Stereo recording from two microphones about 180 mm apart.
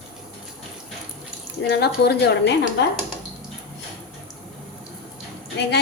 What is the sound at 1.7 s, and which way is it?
Speech, 65° left (ahead or behind).